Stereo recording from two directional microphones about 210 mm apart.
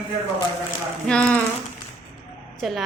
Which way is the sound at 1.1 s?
5° left (ahead or behind).